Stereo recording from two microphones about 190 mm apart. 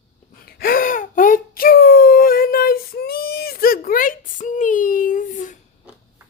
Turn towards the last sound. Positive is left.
turn(degrees=40)  # may be behind; listen again after turning